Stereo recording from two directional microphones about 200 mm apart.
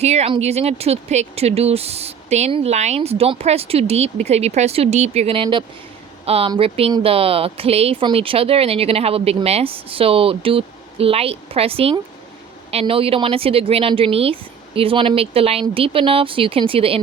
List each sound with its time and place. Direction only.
0.0 s speech: 30° right (ahead or behind)